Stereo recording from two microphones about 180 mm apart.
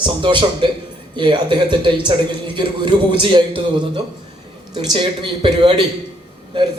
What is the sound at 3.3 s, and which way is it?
A man's voice, 25° right (ahead or behind).